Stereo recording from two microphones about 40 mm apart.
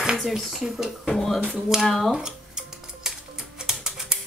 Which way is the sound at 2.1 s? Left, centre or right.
Centre.